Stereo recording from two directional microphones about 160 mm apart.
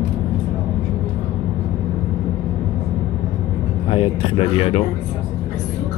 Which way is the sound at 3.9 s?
35° left (ahead or behind).